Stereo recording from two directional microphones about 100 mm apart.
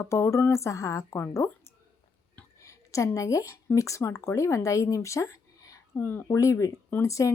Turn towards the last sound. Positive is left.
turn(degrees=30)  # may be behind; listen again after turning